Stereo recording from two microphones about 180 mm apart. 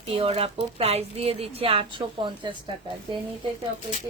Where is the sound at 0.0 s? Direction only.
30° right (ahead or behind).